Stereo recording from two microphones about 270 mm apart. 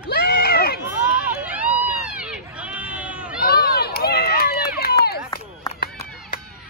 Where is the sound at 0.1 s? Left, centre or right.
Left.